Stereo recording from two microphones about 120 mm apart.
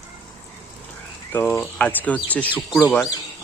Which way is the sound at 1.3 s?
15° left (ahead or behind).